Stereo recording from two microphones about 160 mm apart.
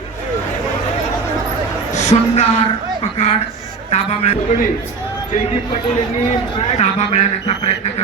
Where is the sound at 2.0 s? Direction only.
45° left (ahead or behind).